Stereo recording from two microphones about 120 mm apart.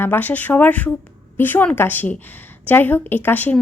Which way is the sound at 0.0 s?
15° left (ahead or behind).